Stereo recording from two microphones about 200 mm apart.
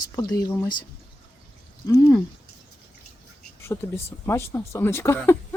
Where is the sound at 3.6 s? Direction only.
10° left (ahead or behind).